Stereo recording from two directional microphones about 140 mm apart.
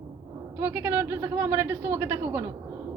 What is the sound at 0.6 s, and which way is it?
A woman's voice, 10° right (ahead or behind).